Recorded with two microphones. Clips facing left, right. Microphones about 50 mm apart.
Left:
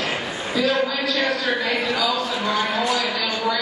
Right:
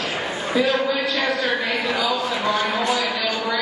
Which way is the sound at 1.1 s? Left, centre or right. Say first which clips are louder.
Even; centre.